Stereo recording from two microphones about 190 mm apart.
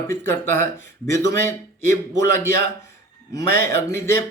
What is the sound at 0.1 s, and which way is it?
Speech, 15° left (ahead or behind).